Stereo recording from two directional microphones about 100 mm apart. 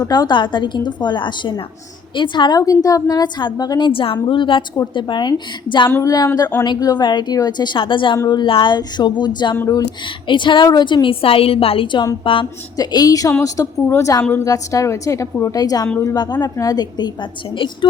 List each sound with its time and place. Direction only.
0.0 s a woman's voice: 45° left (ahead or behind)
2.6 s a woman's voice: 35° left (ahead or behind); by 5.9 s 55° left (ahead or behind)
5.9 s a woman's voice: 35° left (ahead or behind); by 11.9 s 70° left (ahead or behind)
12.2 s a woman's voice: 60° left (ahead or behind)
12.7 s a woman's voice: 40° left (ahead or behind)